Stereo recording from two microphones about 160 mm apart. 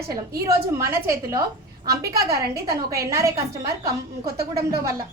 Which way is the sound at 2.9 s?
20° right (ahead or behind).